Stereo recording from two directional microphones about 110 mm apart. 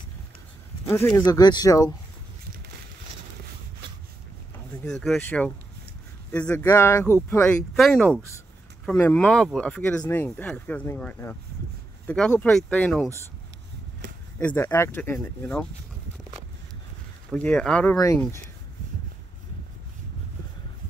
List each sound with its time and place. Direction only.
0.8 s speech: 25° left (ahead or behind)
1.2 s speech: 40° left (ahead or behind)
4.8 s speech: 5° left (ahead or behind)
6.6 s speech: 25° left (ahead or behind)
7.7 s speech: centre (ahead or behind)
9.1 s speech: 10° left (ahead or behind)
12.4 s speech: 5° left (ahead or behind)
14.4 s speech: 20° left (ahead or behind)
17.3 s speech: 10° left (ahead or behind)
17.9 s speech: 30° left (ahead or behind)